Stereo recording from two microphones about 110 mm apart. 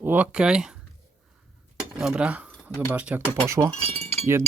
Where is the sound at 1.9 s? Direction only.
5° right (ahead or behind).